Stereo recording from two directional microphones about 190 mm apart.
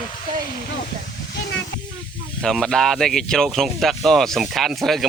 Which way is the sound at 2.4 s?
5° left (ahead or behind).